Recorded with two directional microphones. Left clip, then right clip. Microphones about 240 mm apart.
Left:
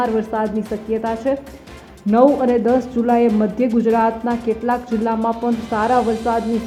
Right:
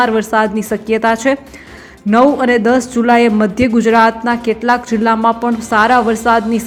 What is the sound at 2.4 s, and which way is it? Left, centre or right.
A woman's voice, centre.